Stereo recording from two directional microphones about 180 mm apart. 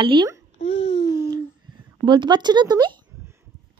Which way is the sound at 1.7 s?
25° right (ahead or behind).